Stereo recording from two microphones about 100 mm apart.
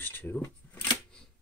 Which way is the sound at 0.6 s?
20° left (ahead or behind).